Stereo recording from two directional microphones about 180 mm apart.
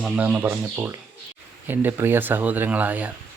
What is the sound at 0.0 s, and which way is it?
Speech, 5° right (ahead or behind).